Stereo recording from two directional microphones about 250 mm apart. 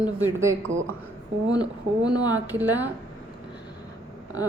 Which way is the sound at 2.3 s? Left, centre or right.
Centre.